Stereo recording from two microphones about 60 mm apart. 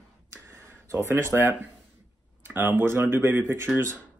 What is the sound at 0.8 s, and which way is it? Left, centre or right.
Speech, right.